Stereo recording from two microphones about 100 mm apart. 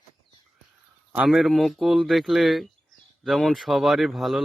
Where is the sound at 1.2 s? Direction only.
Centre (ahead or behind).